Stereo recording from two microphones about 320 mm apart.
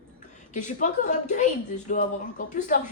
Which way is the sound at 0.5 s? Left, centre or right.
Left.